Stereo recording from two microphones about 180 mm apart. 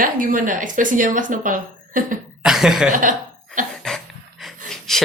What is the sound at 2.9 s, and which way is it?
Speech, 45° right (ahead or behind).